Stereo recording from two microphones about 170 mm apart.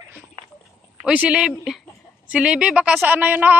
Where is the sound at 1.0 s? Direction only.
10° right (ahead or behind).